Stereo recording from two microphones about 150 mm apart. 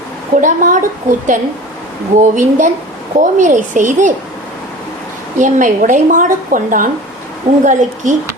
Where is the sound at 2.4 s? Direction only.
60° right (ahead or behind).